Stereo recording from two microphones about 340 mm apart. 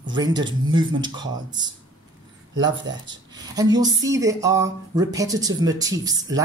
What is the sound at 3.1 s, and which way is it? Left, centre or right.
Speech, centre.